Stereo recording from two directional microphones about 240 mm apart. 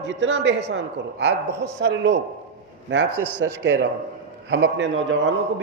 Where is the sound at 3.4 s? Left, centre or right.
Right.